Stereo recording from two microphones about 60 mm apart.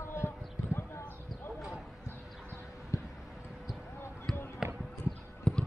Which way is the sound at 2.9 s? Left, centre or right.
Left.